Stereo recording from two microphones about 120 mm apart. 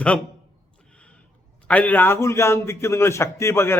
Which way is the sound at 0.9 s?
10° left (ahead or behind).